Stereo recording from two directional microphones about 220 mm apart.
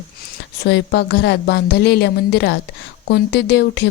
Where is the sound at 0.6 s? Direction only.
50° left (ahead or behind).